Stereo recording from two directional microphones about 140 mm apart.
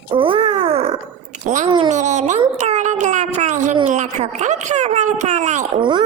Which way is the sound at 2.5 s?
55° right (ahead or behind).